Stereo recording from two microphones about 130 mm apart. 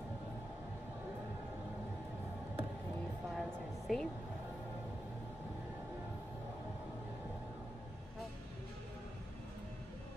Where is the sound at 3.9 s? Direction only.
Centre (ahead or behind).